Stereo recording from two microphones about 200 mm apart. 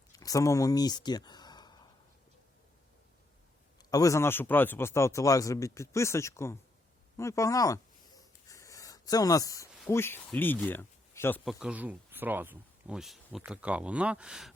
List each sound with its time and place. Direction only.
0.1 s speech: 15° left (ahead or behind)
3.8 s speech: 15° left (ahead or behind)
7.2 s a sound: 15° left (ahead or behind)
9.7 s speech: 10° left (ahead or behind)
11.4 s speech: 5° right (ahead or behind)